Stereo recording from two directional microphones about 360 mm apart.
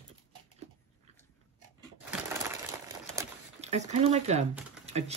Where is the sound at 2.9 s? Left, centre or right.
Centre.